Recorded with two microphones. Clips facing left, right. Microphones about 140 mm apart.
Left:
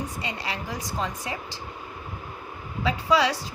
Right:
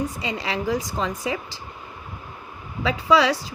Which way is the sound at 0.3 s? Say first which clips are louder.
Right 8 dB; 90° right.